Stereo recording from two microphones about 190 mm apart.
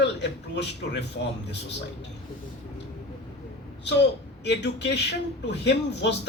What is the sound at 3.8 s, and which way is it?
A woman's voice, 65° left (ahead or behind).